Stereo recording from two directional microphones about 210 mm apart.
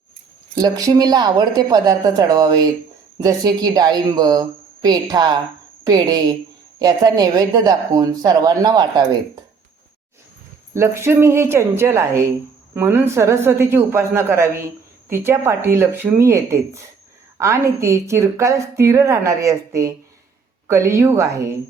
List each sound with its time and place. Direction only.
0.5 s speech: 15° right (ahead or behind)
10.8 s speech: 15° right (ahead or behind)